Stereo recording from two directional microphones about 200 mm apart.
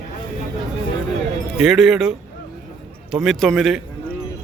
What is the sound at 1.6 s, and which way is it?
Speech, centre (ahead or behind).